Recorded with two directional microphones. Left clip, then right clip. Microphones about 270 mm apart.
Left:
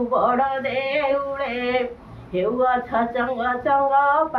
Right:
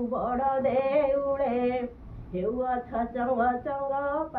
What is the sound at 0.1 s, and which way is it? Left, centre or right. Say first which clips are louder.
Speech: left 8 dB; left.